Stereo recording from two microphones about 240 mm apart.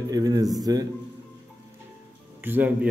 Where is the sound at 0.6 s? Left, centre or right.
Centre.